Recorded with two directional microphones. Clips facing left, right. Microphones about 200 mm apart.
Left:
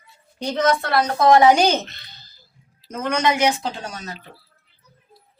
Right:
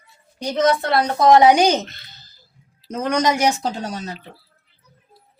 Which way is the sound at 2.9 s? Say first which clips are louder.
Right 2 dB; 35° right (ahead or behind).